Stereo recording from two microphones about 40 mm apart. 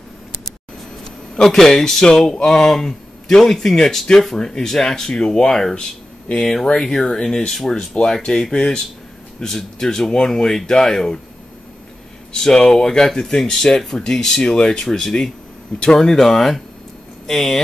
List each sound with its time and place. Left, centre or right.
1.0 s speech: centre
12.4 s speech: centre